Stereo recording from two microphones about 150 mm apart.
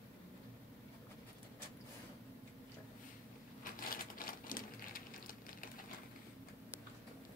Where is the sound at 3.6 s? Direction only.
70° left (ahead or behind).